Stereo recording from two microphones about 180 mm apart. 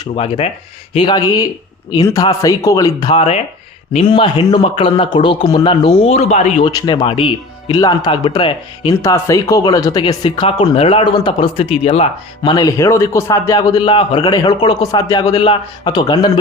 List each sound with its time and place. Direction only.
0.0 s a man's voice: 30° left (ahead or behind)
6.7 s a man's voice: 25° left (ahead or behind)
9.0 s a man's voice: 15° left (ahead or behind); by 12.0 s 35° left (ahead or behind)
12.4 s a man's voice: 20° left (ahead or behind)